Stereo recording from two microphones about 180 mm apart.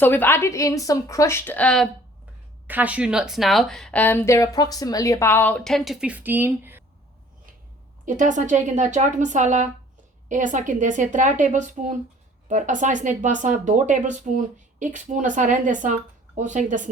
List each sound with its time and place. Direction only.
0.0 s a woman's voice: 10° left (ahead or behind)
2.6 s speech: 10° right (ahead or behind)
8.0 s speech: 45° right (ahead or behind)